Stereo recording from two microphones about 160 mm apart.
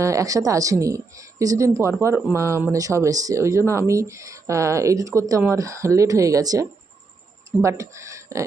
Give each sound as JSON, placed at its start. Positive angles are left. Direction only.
{"t": 0.0, "sound": "speech", "side_deg": -20}